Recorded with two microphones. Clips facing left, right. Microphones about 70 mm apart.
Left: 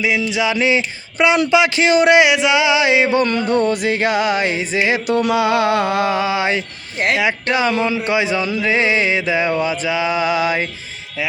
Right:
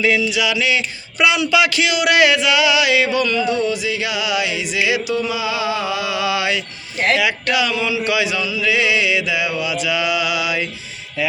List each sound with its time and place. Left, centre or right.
0.2 s a sound: left
1.5 s music: left
5.2 s mantra: left
7.2 s music: left